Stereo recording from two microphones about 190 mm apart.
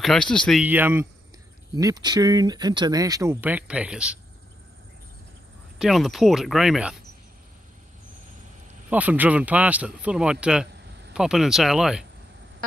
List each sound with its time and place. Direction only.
0.0 s speech: 5° left (ahead or behind)
5.8 s speech: centre (ahead or behind)
8.9 s speech: 10° right (ahead or behind)